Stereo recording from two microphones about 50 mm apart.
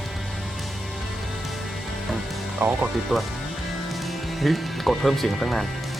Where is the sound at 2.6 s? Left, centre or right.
Right.